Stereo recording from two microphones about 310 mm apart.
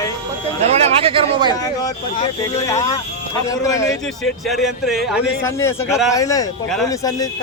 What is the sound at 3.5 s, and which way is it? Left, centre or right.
A man's voice, centre.